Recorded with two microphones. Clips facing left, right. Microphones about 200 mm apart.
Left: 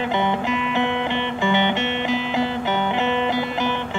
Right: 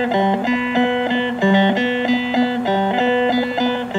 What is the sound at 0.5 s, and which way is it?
Music, 90° right.